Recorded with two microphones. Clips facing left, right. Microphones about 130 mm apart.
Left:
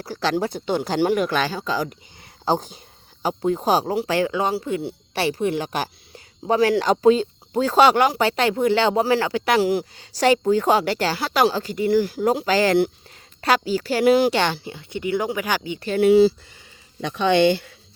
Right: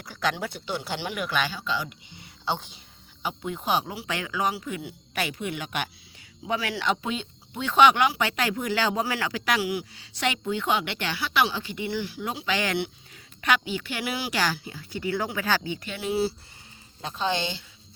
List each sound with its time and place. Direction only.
0.0 s speech: 35° left (ahead or behind)
14.3 s speech: 25° left (ahead or behind)
16.0 s speech: 75° left (ahead or behind)